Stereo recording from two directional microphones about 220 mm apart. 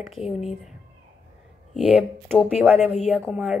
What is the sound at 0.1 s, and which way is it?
Speech, centre (ahead or behind).